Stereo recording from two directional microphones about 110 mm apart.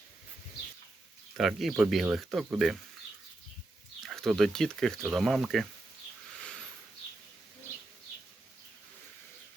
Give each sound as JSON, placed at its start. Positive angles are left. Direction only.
{"t": 1.4, "sound": "speech", "side_deg": 0}
{"t": 4.0, "sound": "speech", "side_deg": 0}